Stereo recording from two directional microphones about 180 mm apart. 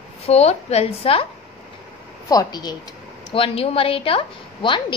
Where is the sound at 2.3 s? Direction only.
20° left (ahead or behind).